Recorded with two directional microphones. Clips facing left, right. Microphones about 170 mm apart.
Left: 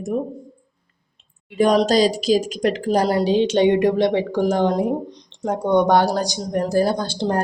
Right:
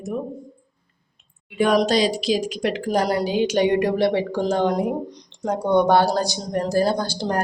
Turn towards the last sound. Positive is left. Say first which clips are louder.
# left 1 dB
turn(degrees=25)  # may be behind; listen again after turning